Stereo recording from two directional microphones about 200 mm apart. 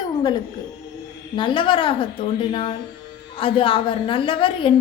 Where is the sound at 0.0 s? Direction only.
20° left (ahead or behind).